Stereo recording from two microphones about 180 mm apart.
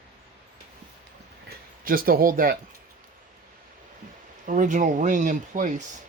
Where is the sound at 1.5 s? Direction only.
55° right (ahead or behind).